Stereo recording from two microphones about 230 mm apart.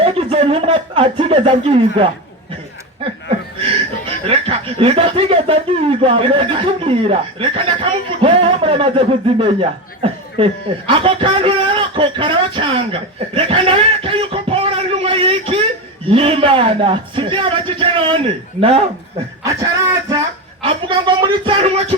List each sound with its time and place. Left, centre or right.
0.0 s speech: right
4.3 s speech: right
19.5 s speech: centre